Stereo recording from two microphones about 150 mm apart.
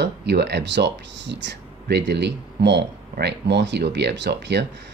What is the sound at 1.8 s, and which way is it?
Speech, 90° right.